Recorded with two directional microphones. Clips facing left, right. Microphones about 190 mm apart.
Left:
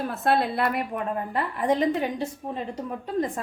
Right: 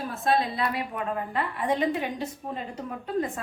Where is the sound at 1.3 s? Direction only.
40° left (ahead or behind).